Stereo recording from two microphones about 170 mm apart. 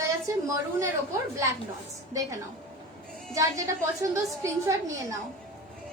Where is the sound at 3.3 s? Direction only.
20° right (ahead or behind).